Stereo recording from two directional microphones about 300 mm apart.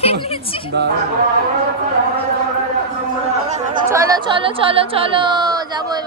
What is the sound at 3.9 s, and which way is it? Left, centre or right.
Speech, centre.